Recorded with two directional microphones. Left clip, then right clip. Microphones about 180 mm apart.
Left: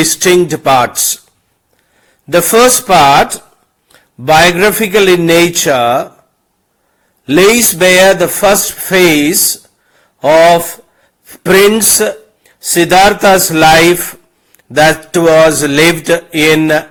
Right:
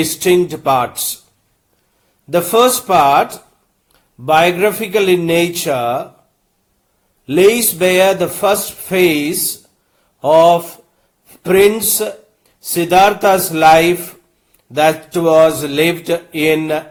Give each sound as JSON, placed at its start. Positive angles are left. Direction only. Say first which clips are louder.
{"t": 0.0, "sound": "mantra", "louder": "left 4 dB", "side_deg": 25}
{"t": 2.3, "sound": "mantra", "louder": "left 5 dB", "side_deg": 25}
{"t": 4.3, "sound": "mantra", "louder": "left 5 dB", "side_deg": 25}
{"t": 7.3, "sound": "mantra", "louder": "left 4 dB", "side_deg": 25}
{"t": 10.2, "sound": "speech", "louder": "left 3 dB", "side_deg": 25}
{"t": 11.4, "sound": "mantra", "louder": "left 4 dB", "side_deg": 25}